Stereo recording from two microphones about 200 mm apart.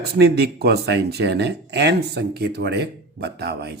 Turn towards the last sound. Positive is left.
turn(degrees=-55)  # may be behind; listen again after turning